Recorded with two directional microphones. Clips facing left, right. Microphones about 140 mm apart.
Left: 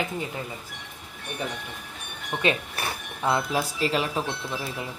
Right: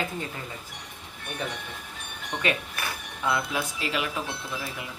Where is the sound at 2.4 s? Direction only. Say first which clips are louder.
Left 3 dB; 25° left (ahead or behind).